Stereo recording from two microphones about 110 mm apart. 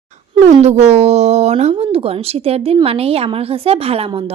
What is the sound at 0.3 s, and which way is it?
Speech, 75° right (ahead or behind).